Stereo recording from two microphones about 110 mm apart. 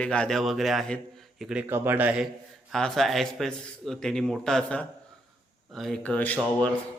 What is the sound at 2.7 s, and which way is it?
Speech, 5° left (ahead or behind).